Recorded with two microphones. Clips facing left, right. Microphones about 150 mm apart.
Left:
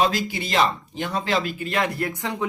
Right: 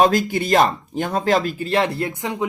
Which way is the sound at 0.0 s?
50° right (ahead or behind).